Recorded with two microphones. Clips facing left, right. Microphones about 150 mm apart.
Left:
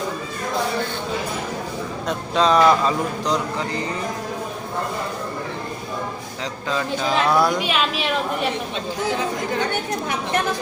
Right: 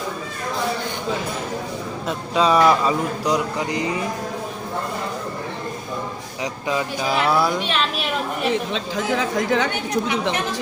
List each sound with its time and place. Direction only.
2.0 s speech: 10° right (ahead or behind)
6.4 s a woman's voice: 10° right (ahead or behind)
8.7 s speech: 90° right